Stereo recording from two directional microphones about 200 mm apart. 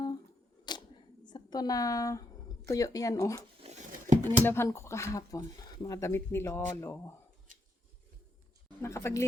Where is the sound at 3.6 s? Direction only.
30° right (ahead or behind).